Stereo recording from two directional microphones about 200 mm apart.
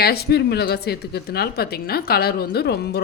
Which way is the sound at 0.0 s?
50° left (ahead or behind).